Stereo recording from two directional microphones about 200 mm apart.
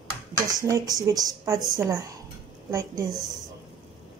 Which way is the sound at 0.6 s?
15° right (ahead or behind).